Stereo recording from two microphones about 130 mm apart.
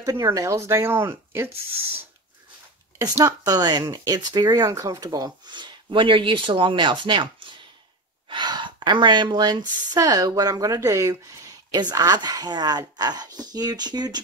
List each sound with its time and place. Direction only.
0.0 s speech: 25° right (ahead or behind)
3.0 s speech: 25° right (ahead or behind)
8.3 s speech: 35° right (ahead or behind)